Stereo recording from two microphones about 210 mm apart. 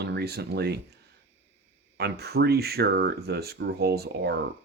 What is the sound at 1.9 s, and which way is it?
Speech, 50° right (ahead or behind).